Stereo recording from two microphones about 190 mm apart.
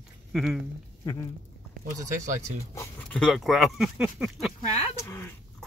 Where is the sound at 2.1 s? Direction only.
40° right (ahead or behind).